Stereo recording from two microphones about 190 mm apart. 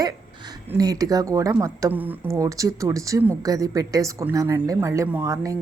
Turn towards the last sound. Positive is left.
turn(degrees=-15)  # may be behind; listen again after turning